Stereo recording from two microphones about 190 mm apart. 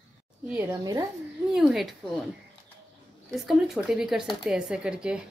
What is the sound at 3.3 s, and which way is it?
Speech, centre (ahead or behind).